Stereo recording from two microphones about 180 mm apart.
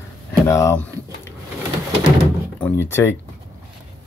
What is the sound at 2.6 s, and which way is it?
Speech, 15° left (ahead or behind).